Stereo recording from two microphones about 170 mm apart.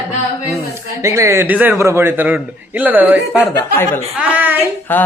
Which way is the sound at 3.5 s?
15° left (ahead or behind).